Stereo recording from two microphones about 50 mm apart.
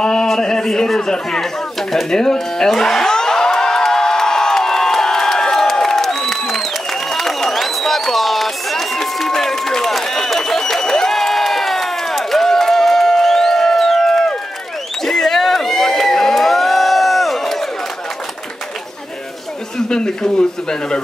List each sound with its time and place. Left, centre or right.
0.0 s a sound: centre
15.0 s crowd: centre
19.9 s speech: centre